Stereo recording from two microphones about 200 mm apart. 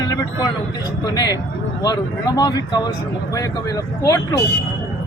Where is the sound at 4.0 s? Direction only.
15° left (ahead or behind).